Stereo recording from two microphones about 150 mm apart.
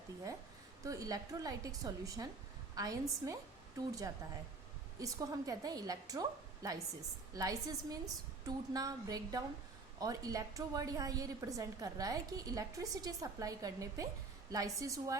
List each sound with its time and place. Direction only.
0.9 s a woman's voice: 25° right (ahead or behind)